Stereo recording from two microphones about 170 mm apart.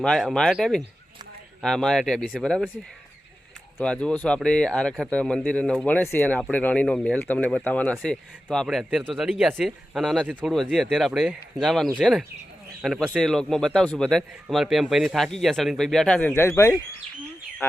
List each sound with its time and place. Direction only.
0.0 s a man's voice: 5° left (ahead or behind)
3.8 s a man's voice: 5° left (ahead or behind)